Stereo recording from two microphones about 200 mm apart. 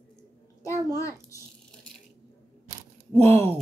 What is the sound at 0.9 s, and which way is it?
Speech, 15° left (ahead or behind).